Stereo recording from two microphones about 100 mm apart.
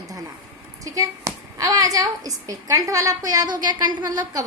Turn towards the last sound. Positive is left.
turn(degrees=-35)  # may be behind; listen again after turning